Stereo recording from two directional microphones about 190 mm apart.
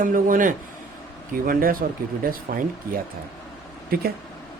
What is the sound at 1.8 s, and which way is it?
Speech, 45° right (ahead or behind).